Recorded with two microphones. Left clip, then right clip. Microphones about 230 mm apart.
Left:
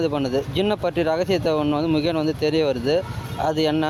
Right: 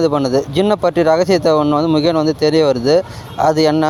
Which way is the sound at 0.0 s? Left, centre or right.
Right.